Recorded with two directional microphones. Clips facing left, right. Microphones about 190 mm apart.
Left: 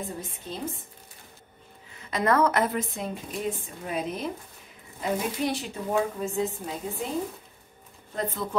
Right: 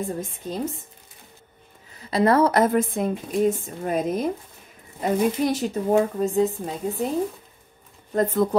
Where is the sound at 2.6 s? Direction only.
45° right (ahead or behind).